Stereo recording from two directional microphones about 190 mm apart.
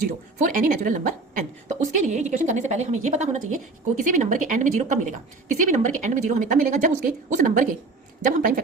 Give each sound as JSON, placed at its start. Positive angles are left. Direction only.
{"t": 0.3, "sound": "a woman's voice", "side_deg": -45}